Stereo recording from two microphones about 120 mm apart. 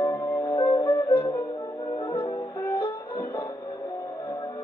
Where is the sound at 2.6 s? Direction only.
20° left (ahead or behind).